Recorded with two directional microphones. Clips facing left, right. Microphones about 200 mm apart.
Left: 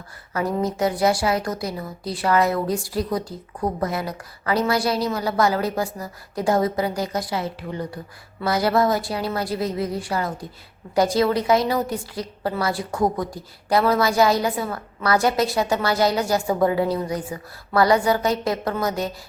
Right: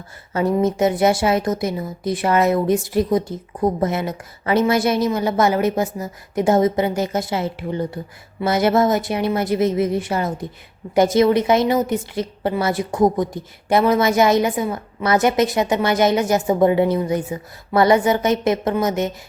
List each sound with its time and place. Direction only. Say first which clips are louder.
0.3 s a woman's voice: right 5 dB; 25° right (ahead or behind)